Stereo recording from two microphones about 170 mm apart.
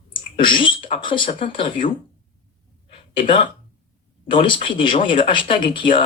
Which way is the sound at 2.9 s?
30° left (ahead or behind).